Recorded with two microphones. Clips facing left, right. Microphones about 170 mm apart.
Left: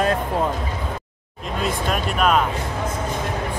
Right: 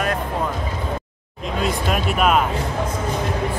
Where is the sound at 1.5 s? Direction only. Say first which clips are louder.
Right 1 dB; centre (ahead or behind).